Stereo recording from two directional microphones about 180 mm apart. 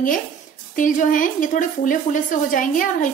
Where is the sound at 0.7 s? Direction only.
45° left (ahead or behind).